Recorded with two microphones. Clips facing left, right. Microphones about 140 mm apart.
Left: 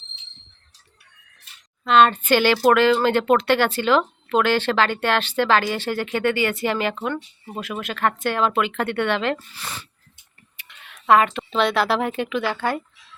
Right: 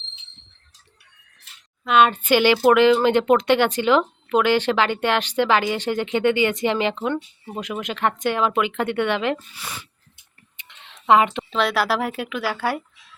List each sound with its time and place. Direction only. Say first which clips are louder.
1.9 s speech: left 1 dB; 10° right (ahead or behind)
10.6 s a sound: even; 25° right (ahead or behind)
11.5 s a woman's voice: left 2 dB; centre (ahead or behind)